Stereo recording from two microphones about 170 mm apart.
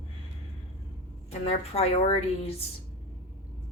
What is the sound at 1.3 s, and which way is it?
Speech, 35° left (ahead or behind).